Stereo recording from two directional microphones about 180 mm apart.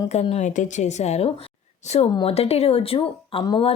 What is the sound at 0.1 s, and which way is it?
Speech, 35° left (ahead or behind).